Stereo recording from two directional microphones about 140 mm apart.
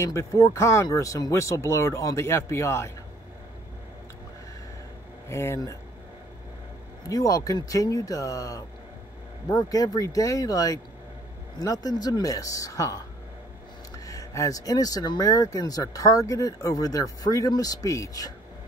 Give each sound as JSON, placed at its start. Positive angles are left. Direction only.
{"t": 0.0, "sound": "speech", "side_deg": 20}
{"t": 5.3, "sound": "speech", "side_deg": 20}
{"t": 7.1, "sound": "speech", "side_deg": 25}